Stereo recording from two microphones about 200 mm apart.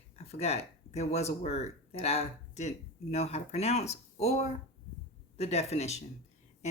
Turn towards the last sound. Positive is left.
turn(degrees=30)  # may be behind; listen again after turning